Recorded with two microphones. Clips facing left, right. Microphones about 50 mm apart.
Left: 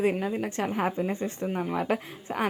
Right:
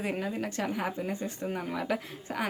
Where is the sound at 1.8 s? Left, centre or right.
Left.